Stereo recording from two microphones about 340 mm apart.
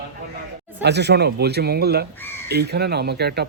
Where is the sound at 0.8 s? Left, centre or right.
Right.